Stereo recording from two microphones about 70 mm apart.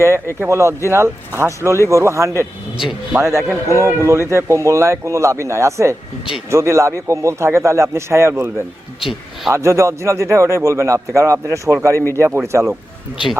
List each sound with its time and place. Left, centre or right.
0.4 s speech: right
2.7 s speech: centre
3.2 s speech: right
9.0 s a sound: centre
9.5 s speech: right
11.9 s a man's voice: left